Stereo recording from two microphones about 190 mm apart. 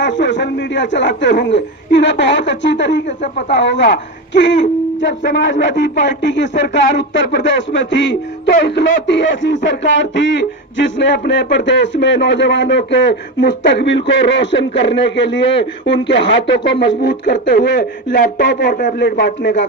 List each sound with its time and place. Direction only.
0.0 s speech: 70° left (ahead or behind)
18.1 s speech: 45° left (ahead or behind)
18.9 s speech: 70° left (ahead or behind)